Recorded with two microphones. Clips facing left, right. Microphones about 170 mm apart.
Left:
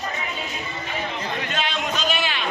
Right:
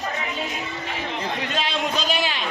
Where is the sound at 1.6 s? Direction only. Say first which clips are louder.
Right 1 dB; 35° right (ahead or behind).